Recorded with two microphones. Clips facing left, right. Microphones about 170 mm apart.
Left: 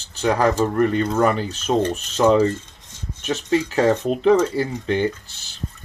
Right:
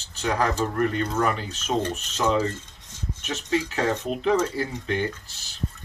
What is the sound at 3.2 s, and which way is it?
Speech, 35° left (ahead or behind).